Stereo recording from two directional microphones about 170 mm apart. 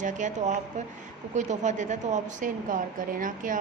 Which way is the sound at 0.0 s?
45° right (ahead or behind).